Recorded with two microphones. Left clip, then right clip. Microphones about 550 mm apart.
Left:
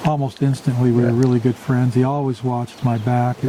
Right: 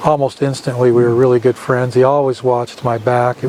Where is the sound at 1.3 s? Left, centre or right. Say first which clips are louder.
Right 8 dB; right.